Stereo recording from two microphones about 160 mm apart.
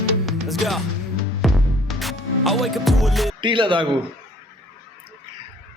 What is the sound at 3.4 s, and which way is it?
Speech, 30° right (ahead or behind).